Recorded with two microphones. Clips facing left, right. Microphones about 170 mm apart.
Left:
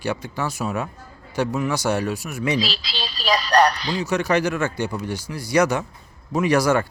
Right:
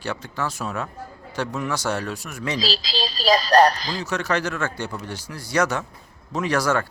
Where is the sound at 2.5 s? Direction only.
35° right (ahead or behind).